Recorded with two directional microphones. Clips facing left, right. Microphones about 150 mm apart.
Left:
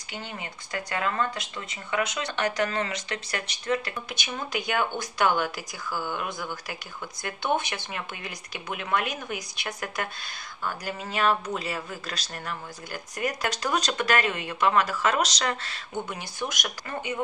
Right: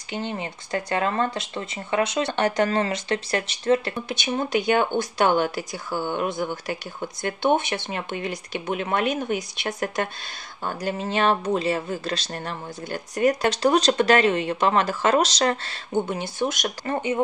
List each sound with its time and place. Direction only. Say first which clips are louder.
0.1 s speech: right 8 dB; 30° right (ahead or behind)